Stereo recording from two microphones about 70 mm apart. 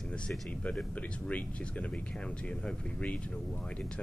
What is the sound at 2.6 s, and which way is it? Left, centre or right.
Speech, centre.